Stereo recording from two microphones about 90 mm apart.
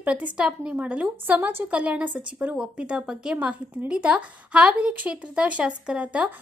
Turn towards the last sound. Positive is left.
turn(degrees=-15)  # may be behind; listen again after turning